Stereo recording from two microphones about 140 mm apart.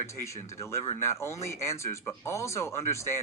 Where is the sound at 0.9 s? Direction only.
20° left (ahead or behind).